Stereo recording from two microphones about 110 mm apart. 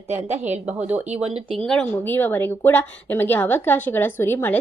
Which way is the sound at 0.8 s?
15° right (ahead or behind).